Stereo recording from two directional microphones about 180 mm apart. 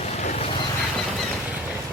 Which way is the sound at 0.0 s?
40° left (ahead or behind).